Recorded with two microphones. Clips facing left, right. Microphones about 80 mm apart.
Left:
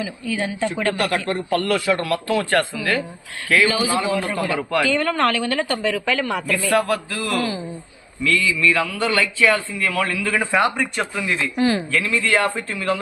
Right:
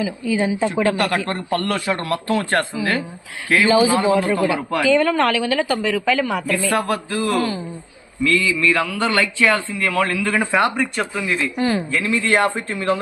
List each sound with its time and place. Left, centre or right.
0.0 s speech: centre
0.9 s a man's voice: right
1.6 s a man's voice: right
4.4 s speech: centre
4.8 s speech: centre
6.7 s a man's voice: right
7.3 s speech: centre
8.3 s a man's voice: right
10.4 s speech: centre
12.0 s a man's voice: right